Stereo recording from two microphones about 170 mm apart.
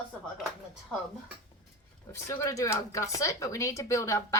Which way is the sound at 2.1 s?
15° left (ahead or behind).